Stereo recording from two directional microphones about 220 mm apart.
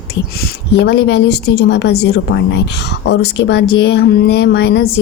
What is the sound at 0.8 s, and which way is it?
A woman's voice, 50° left (ahead or behind).